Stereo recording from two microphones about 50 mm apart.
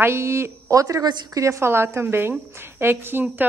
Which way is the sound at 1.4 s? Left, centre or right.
Right.